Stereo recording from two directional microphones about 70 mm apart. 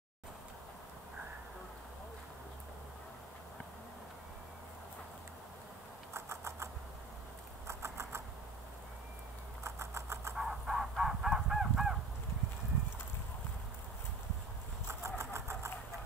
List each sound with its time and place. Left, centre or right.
6.1 s a sound: right
9.6 s typing: right
10.3 s caw: centre
14.9 s engine: right